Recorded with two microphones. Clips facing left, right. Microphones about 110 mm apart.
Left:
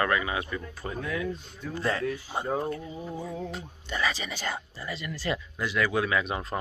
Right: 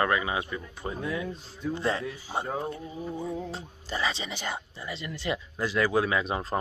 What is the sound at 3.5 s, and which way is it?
Speech, 30° right (ahead or behind).